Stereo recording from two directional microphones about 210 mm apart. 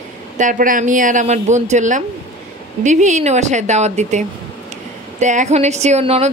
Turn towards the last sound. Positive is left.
turn(degrees=-30)  # may be behind; listen again after turning